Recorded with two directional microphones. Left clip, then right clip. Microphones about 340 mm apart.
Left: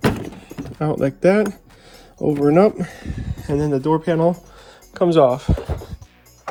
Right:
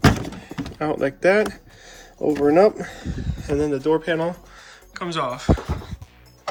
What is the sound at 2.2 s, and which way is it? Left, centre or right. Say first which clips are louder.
Speech: left 1 dB; left.